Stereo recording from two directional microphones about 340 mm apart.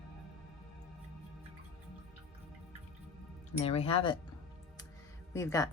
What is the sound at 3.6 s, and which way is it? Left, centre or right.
Speech, centre.